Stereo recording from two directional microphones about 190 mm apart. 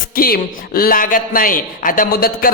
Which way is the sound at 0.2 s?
50° left (ahead or behind).